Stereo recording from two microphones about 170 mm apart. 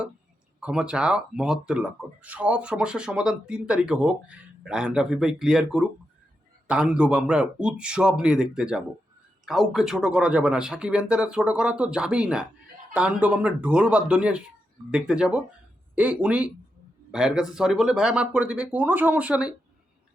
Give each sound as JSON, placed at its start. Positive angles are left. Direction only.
{"t": 0.6, "sound": "speech", "side_deg": -5}